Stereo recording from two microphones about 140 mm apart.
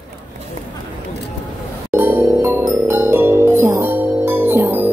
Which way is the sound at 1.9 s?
15° right (ahead or behind).